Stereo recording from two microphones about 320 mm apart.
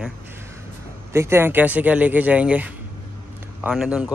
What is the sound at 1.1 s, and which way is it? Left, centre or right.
Speech, centre.